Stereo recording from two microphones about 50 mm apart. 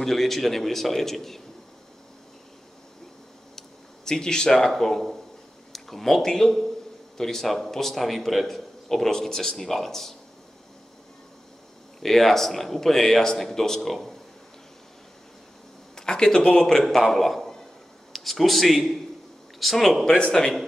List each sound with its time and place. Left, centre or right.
0.0 s a man's voice: centre
3.5 s a man's voice: centre
12.0 s a man's voice: centre
15.9 s speech: centre
16.8 s a man's voice: centre
20.1 s speech: centre